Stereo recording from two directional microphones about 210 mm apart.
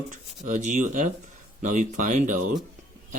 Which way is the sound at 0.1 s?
35° right (ahead or behind).